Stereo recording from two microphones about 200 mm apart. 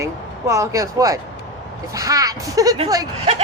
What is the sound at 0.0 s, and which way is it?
A woman's voice, 15° right (ahead or behind).